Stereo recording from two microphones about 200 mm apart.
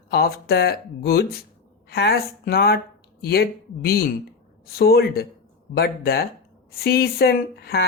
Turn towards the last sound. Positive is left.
turn(degrees=50)  # may be behind; listen again after turning